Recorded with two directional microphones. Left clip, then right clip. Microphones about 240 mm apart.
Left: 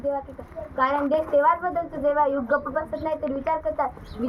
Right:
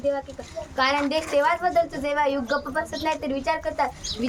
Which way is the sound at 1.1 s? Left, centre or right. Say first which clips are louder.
Left 2 dB; right.